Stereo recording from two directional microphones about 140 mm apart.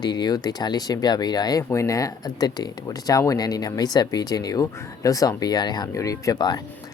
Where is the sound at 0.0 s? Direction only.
30° left (ahead or behind).